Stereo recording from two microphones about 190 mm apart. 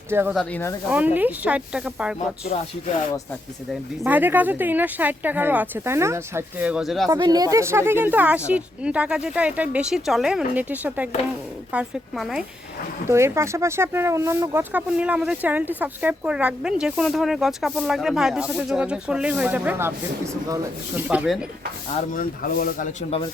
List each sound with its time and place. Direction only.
0.1 s speech: 10° right (ahead or behind)
0.3 s speech: 10° left (ahead or behind)
0.9 s speech: 10° right (ahead or behind)
4.0 s speech: 10° right (ahead or behind)
7.1 s speech: 20° right (ahead or behind); by 12.5 s centre (ahead or behind)
13.1 s speech: 15° right (ahead or behind)
21.8 s speech: 45° left (ahead or behind)